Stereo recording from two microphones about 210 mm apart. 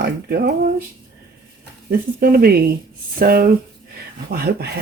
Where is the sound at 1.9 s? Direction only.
45° right (ahead or behind).